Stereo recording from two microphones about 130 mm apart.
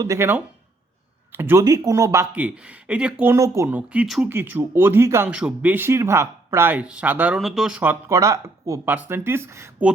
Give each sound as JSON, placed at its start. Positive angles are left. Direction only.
{"t": 0.0, "sound": "speech", "side_deg": -20}
{"t": 2.3, "sound": "speech", "side_deg": -10}
{"t": 3.3, "sound": "speech", "side_deg": -25}
{"t": 3.7, "sound": "speech", "side_deg": -10}
{"t": 4.3, "sound": "speech", "side_deg": -15}
{"t": 5.3, "sound": "speech", "side_deg": -10}
{"t": 7.3, "sound": "speech", "side_deg": 0}
{"t": 7.8, "sound": "speech", "side_deg": -15}